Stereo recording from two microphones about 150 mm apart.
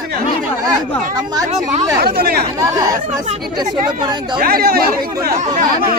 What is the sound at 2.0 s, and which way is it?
Speech, 85° right.